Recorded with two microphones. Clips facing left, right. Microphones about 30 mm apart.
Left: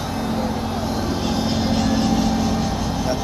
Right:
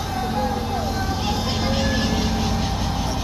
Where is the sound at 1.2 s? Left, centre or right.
Centre.